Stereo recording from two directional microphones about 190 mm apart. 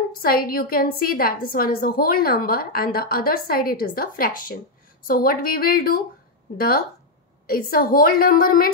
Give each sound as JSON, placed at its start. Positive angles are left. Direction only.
{"t": 0.1, "sound": "a woman's voice", "side_deg": 50}
{"t": 7.4, "sound": "a woman's voice", "side_deg": 50}